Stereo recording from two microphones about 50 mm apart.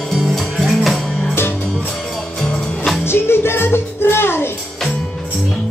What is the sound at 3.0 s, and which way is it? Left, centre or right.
Music, left.